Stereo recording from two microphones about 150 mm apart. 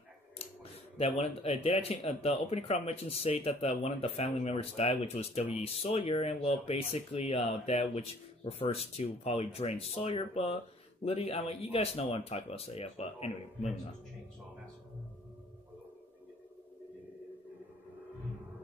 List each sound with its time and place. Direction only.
0.9 s speech: 45° left (ahead or behind)